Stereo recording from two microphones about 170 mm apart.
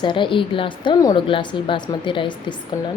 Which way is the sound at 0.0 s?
30° left (ahead or behind).